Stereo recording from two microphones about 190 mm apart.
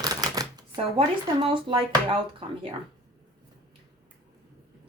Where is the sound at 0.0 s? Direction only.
20° right (ahead or behind).